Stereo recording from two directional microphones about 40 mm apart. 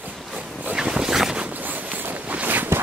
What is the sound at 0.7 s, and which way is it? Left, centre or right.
Boat, centre.